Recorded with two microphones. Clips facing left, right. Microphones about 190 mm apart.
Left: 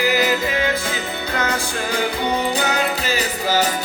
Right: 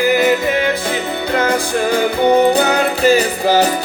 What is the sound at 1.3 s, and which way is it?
Music, 30° right (ahead or behind).